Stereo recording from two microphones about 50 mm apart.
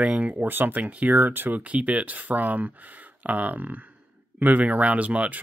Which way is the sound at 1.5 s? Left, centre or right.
Right.